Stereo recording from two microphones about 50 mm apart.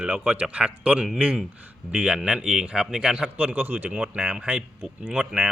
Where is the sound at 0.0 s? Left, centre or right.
Right.